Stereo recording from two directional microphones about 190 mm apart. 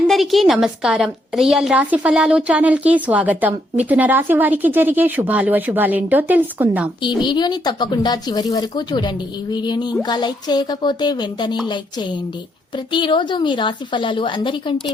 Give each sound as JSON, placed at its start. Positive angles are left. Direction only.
{"t": 0.1, "sound": "a woman's voice", "side_deg": 0}
{"t": 7.0, "sound": "a woman's voice", "side_deg": 25}
{"t": 12.7, "sound": "a woman's voice", "side_deg": 25}